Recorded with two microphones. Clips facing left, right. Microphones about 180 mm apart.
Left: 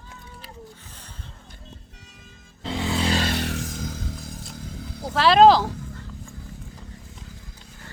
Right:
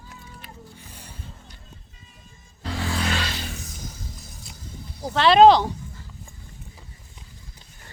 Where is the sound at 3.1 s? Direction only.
55° left (ahead or behind).